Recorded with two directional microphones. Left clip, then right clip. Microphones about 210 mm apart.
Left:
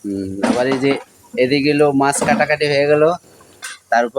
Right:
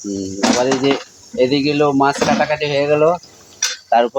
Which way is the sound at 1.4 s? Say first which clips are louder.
Left 1 dB; 5° left (ahead or behind).